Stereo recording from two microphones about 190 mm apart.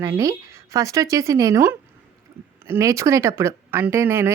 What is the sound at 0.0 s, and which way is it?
Speech, 15° right (ahead or behind).